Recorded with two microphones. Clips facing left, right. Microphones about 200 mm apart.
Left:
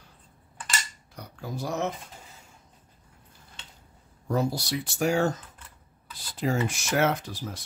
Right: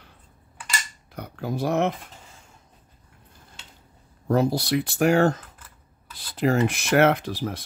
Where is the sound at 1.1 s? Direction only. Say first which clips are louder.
Right 7 dB; 60° right (ahead or behind).